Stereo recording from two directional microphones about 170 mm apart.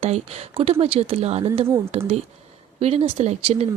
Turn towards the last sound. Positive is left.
turn(degrees=-40)  # may be behind; listen again after turning